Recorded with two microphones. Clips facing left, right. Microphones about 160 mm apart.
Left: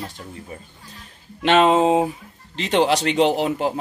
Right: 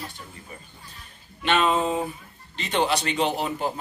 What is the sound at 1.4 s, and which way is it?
Speech, 90° left.